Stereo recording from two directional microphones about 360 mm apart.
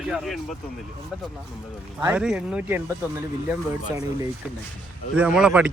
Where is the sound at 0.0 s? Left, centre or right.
Centre.